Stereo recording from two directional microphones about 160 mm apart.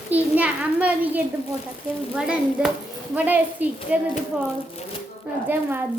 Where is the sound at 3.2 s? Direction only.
10° right (ahead or behind).